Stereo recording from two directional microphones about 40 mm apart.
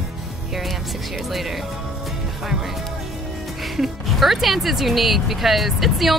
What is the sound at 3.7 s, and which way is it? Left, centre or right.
Speech, centre.